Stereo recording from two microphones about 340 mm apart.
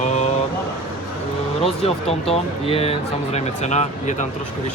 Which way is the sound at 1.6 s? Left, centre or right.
Centre.